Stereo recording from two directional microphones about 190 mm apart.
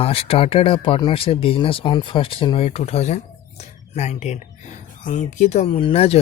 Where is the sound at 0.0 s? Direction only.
30° left (ahead or behind).